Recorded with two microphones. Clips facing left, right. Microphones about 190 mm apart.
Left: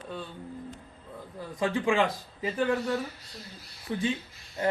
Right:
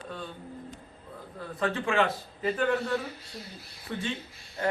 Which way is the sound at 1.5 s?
15° left (ahead or behind).